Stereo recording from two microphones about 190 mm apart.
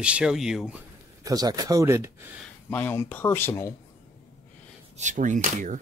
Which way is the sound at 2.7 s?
10° left (ahead or behind).